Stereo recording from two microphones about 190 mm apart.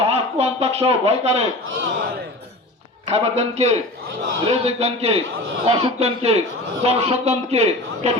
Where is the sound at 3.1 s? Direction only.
35° right (ahead or behind).